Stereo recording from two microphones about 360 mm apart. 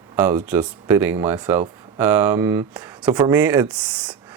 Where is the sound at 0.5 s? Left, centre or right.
Centre.